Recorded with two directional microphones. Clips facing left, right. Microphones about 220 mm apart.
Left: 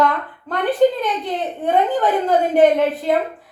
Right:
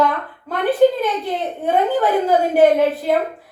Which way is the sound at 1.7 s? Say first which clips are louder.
Right 1 dB; 5° right (ahead or behind).